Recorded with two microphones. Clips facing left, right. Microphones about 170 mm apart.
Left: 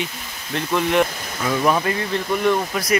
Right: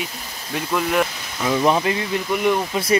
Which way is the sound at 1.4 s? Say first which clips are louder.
Right 1 dB; 20° right (ahead or behind).